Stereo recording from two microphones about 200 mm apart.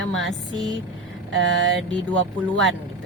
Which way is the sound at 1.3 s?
70° right (ahead or behind).